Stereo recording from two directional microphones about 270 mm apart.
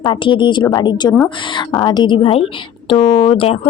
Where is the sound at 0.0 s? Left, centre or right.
Centre.